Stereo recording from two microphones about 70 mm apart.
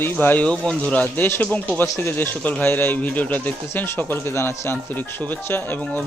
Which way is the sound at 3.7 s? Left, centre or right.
Left.